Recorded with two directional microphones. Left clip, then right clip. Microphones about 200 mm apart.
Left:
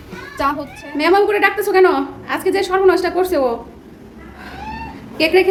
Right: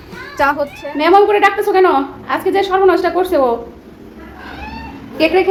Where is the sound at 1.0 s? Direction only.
Centre (ahead or behind).